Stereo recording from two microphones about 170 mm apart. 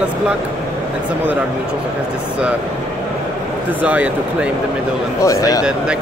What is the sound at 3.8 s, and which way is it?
Speech, 10° right (ahead or behind).